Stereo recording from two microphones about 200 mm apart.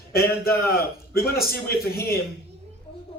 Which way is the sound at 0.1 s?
50° left (ahead or behind).